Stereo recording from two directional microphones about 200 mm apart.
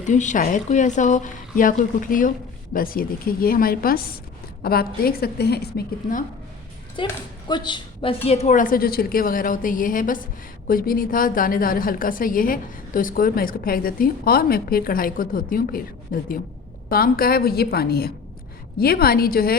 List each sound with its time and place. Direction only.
0.0 s a woman's voice: 40° left (ahead or behind)
6.9 s a woman's voice: 25° left (ahead or behind); by 19.5 s 50° left (ahead or behind)